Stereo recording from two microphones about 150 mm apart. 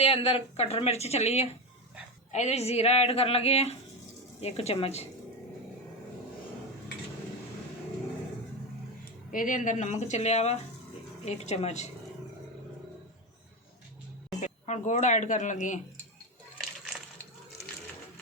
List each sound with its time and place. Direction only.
0.0 s speech: 40° left (ahead or behind)
9.3 s speech: 65° left (ahead or behind); by 11.9 s 45° left (ahead or behind)
14.3 s speech: 55° left (ahead or behind)